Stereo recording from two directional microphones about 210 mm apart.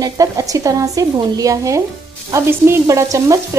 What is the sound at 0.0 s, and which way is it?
Frying, 15° right (ahead or behind).